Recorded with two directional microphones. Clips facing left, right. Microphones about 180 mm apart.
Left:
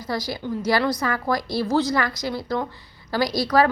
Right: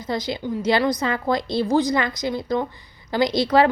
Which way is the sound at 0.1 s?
20° right (ahead or behind).